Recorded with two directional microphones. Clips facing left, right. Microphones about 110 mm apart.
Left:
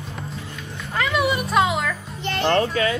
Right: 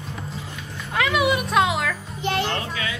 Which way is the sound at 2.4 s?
45° left (ahead or behind).